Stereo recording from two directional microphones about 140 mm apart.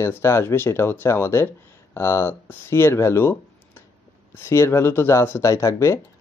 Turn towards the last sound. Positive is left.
turn(degrees=20)  # may be behind; listen again after turning